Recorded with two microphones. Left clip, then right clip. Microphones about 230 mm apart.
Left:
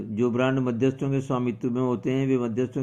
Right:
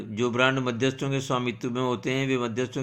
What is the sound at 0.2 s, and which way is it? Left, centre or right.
Speech, right.